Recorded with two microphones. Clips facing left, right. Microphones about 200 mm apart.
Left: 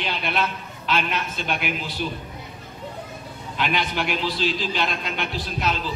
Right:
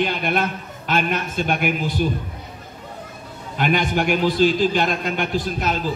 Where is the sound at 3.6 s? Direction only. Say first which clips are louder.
Right 5 dB; 45° right (ahead or behind).